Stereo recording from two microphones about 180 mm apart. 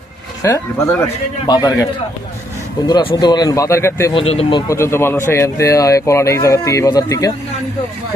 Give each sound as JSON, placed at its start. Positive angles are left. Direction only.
{"t": 0.4, "sound": "speech", "side_deg": 15}
{"t": 4.1, "sound": "speech", "side_deg": 30}
{"t": 4.7, "sound": "speech", "side_deg": 15}